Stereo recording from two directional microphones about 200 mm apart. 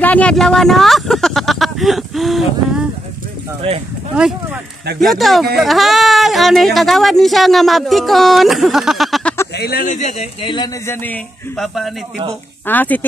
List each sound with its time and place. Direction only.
0.0 s a sound: 5° left (ahead or behind)
5.0 s speech: centre (ahead or behind)
9.6 s speech: 50° left (ahead or behind)
9.9 s speech: 35° left (ahead or behind)
10.9 s speech: 10° left (ahead or behind)